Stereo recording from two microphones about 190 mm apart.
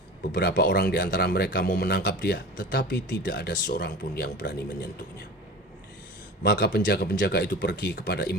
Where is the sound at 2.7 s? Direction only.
65° left (ahead or behind).